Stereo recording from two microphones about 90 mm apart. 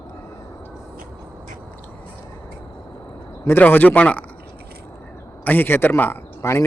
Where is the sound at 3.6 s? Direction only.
20° left (ahead or behind).